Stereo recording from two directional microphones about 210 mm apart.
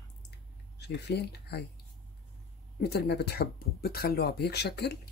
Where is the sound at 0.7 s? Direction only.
55° left (ahead or behind).